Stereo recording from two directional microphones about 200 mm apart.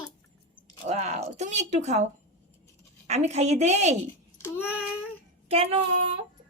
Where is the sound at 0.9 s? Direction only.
35° right (ahead or behind).